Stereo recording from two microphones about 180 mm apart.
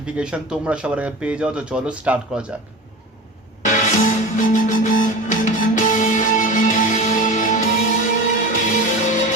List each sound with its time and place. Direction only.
0.0 s speech: 5° right (ahead or behind)
3.7 s music: 45° left (ahead or behind)